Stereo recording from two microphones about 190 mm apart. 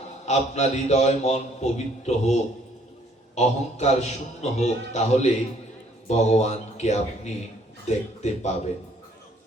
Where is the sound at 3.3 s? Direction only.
35° left (ahead or behind).